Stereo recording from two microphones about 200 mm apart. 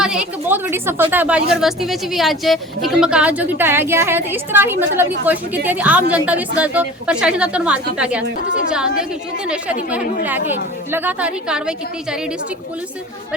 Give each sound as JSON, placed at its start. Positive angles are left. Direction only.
{"t": 0.0, "sound": "a woman's voice", "side_deg": -5}
{"t": 10.2, "sound": "speech", "side_deg": -10}